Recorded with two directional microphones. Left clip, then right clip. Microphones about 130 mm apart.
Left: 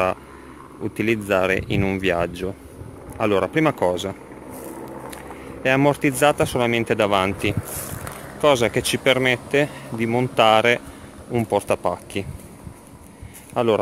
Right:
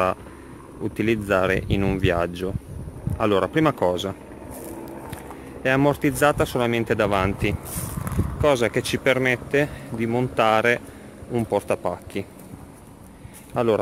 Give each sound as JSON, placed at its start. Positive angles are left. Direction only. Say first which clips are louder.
{"t": 0.9, "sound": "speech", "louder": "left 1 dB", "side_deg": -20}
{"t": 5.1, "sound": "speech", "louder": "left 2 dB", "side_deg": -5}
{"t": 13.5, "sound": "speech", "louder": "left 2 dB", "side_deg": -10}